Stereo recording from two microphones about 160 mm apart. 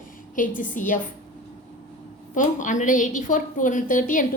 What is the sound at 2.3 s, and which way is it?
A woman's voice, 50° left (ahead or behind).